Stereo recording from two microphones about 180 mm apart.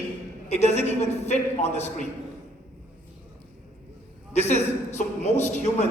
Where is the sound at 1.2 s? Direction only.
40° left (ahead or behind).